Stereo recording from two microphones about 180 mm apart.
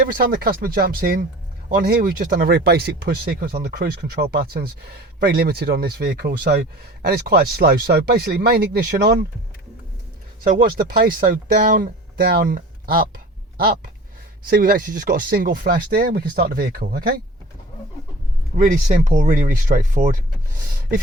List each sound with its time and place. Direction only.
0.0 s speech: 50° right (ahead or behind)
10.4 s speech: 50° right (ahead or behind)
18.5 s speech: 50° right (ahead or behind)